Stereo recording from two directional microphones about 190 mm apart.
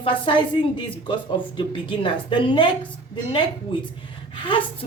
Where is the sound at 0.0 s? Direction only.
25° left (ahead or behind).